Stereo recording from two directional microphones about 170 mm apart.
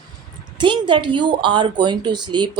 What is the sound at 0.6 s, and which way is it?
Speech, 30° right (ahead or behind).